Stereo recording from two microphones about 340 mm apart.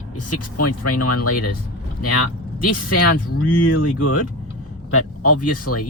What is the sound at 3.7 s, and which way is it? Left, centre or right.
Speech, left.